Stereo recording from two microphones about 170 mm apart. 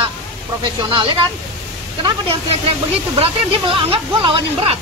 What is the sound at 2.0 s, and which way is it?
Speech, 30° right (ahead or behind).